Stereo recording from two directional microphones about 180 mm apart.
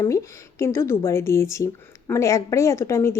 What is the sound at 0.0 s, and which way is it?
Speech, 15° left (ahead or behind).